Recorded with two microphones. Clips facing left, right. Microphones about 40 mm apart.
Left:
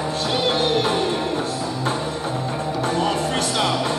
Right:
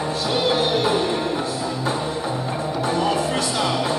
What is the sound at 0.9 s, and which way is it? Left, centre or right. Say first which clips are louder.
Music: even; right.